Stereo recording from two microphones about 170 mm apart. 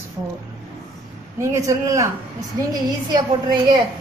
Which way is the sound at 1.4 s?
20° right (ahead or behind).